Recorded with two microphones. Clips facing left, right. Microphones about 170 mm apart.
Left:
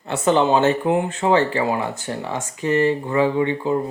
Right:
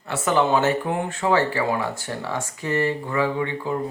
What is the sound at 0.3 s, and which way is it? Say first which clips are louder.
Speech: left 3 dB; 25° left (ahead or behind).